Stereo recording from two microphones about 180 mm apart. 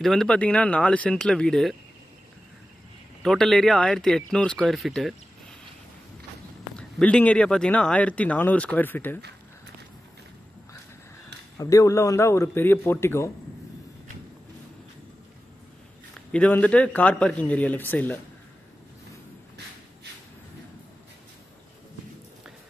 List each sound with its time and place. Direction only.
0.0 s speech: centre (ahead or behind)
3.2 s speech: centre (ahead or behind)
6.8 s speech: 5° left (ahead or behind)
11.5 s speech: 20° left (ahead or behind)
16.3 s speech: 10° left (ahead or behind)